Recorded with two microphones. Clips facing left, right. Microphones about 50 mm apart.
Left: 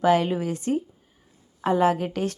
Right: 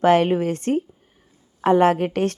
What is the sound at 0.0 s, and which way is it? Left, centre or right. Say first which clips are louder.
A woman's voice: right 4 dB; right.